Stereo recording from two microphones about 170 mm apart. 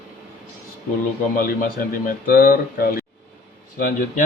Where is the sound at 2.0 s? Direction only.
55° left (ahead or behind).